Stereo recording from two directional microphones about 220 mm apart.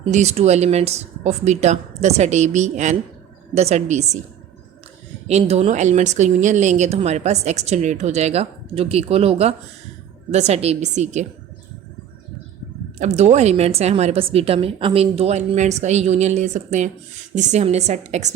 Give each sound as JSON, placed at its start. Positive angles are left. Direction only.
{"t": 0.1, "sound": "speech", "side_deg": -30}
{"t": 5.3, "sound": "speech", "side_deg": -30}
{"t": 13.0, "sound": "speech", "side_deg": -30}